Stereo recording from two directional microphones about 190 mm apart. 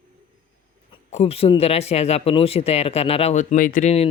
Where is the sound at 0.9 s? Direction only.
30° left (ahead or behind).